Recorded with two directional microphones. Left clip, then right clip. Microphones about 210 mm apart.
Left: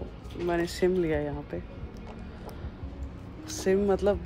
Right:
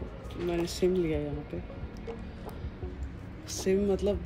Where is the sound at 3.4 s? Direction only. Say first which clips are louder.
Left 3 dB; 5° right (ahead or behind).